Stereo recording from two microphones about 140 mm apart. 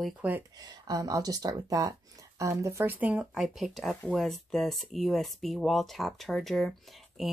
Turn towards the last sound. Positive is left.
turn(degrees=0)  # may be behind; listen again after turning